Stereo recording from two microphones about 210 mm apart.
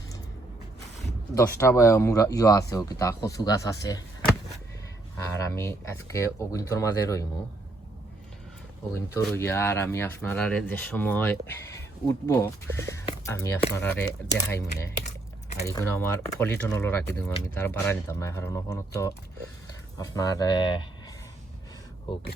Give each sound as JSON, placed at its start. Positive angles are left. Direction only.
{"t": 1.4, "sound": "speech", "side_deg": 15}
{"t": 9.1, "sound": "speech", "side_deg": 10}
{"t": 22.1, "sound": "speech", "side_deg": 25}